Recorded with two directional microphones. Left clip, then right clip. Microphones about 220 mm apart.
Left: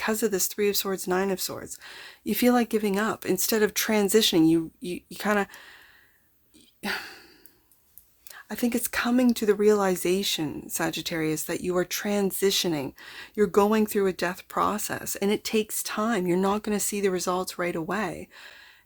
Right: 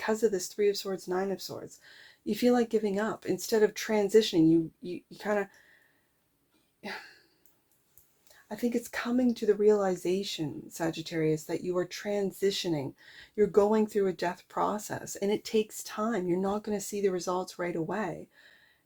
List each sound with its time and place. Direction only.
0.0 s speech: 35° left (ahead or behind)
6.8 s a sound: 45° left (ahead or behind)
8.3 s speech: 40° left (ahead or behind)